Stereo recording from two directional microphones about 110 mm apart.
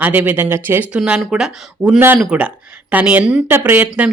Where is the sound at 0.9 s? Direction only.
5° right (ahead or behind).